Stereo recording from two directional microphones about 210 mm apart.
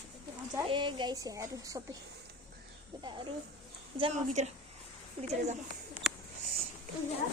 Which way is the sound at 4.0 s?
30° right (ahead or behind).